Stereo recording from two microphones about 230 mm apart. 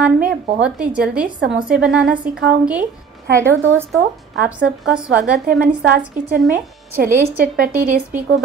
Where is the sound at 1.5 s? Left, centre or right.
Centre.